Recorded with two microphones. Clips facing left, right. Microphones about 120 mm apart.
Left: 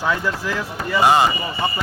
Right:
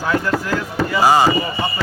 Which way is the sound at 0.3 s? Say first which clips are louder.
Right 4 dB; 85° right.